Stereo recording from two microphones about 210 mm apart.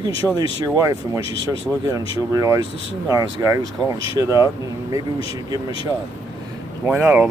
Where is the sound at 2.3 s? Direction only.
15° right (ahead or behind).